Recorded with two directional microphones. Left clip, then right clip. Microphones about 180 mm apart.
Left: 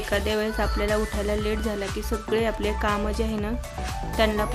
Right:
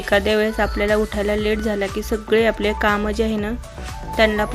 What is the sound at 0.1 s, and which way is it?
Speech, 25° right (ahead or behind).